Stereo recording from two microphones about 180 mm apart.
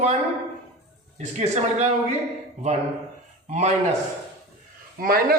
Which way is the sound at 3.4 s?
40° right (ahead or behind).